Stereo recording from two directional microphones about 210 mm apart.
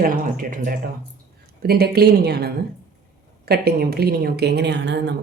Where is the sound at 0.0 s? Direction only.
40° right (ahead or behind).